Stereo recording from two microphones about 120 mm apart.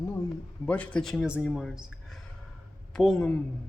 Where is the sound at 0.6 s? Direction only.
10° left (ahead or behind).